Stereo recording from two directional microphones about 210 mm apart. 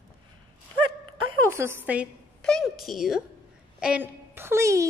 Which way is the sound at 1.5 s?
10° right (ahead or behind).